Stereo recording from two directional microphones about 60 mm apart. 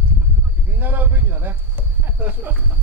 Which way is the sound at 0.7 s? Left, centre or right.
Right.